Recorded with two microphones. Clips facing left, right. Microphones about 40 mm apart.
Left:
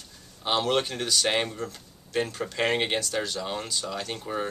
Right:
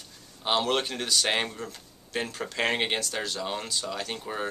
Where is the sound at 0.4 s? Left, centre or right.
Centre.